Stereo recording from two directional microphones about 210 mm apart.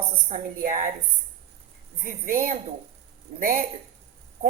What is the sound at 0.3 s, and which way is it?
Speech, 40° right (ahead or behind).